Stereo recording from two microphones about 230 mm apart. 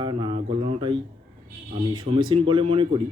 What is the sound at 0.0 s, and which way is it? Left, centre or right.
Speech, right.